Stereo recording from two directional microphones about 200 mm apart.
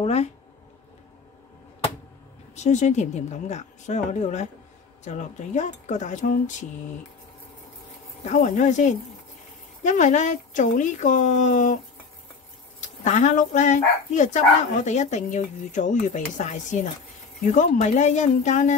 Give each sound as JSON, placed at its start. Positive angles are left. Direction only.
{"t": 0.0, "sound": "speech", "side_deg": 30}
{"t": 2.5, "sound": "speech", "side_deg": 35}
{"t": 8.3, "sound": "speech", "side_deg": 40}
{"t": 13.0, "sound": "speech", "side_deg": 35}